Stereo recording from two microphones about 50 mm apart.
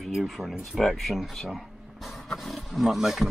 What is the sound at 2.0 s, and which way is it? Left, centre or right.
Roaring cats, centre.